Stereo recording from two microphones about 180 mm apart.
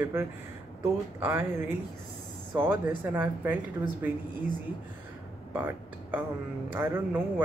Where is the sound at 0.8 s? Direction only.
15° right (ahead or behind).